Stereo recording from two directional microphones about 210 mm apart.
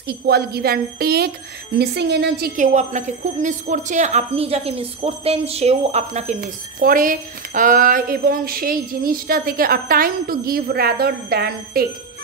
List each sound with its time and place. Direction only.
0.1 s a woman's voice: 50° right (ahead or behind)